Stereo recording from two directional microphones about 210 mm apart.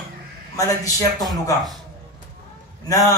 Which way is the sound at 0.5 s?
15° left (ahead or behind).